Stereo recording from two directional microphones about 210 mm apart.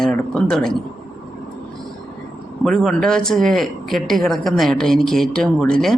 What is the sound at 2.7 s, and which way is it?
Speech, centre (ahead or behind).